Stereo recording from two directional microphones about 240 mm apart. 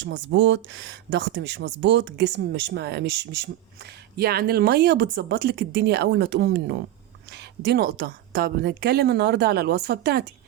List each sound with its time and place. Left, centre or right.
0.0 s a woman's voice: right